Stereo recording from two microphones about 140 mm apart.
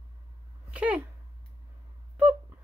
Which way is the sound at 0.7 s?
10° right (ahead or behind).